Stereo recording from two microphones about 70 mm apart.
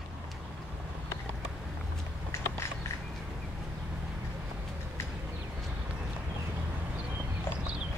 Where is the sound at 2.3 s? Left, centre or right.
Left.